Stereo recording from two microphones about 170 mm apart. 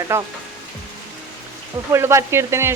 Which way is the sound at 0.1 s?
15° right (ahead or behind).